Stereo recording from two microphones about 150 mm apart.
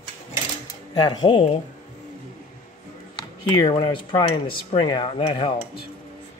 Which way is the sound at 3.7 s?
35° left (ahead or behind).